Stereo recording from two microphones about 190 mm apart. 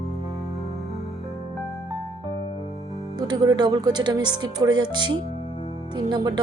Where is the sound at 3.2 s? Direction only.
20° right (ahead or behind).